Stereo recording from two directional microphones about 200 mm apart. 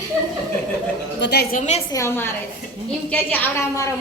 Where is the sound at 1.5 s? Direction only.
35° left (ahead or behind).